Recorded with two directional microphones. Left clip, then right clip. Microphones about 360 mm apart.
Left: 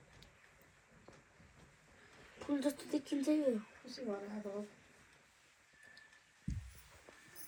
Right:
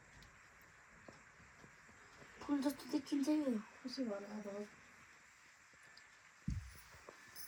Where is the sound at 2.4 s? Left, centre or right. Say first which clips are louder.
Left 2 dB; centre.